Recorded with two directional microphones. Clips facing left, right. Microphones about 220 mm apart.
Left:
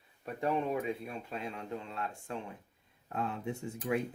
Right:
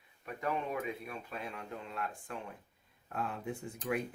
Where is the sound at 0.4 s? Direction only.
30° left (ahead or behind).